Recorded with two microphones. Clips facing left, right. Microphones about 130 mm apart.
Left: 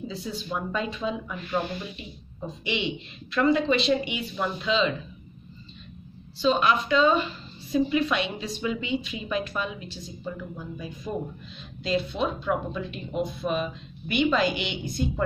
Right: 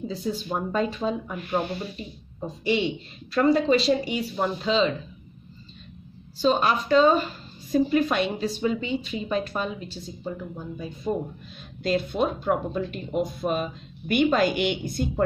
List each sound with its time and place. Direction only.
0.1 s a woman's voice: 40° right (ahead or behind)
6.3 s a woman's voice: 40° right (ahead or behind)
11.5 s speech: 50° right (ahead or behind)